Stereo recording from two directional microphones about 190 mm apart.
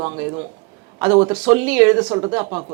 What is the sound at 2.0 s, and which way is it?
Speech, 20° right (ahead or behind).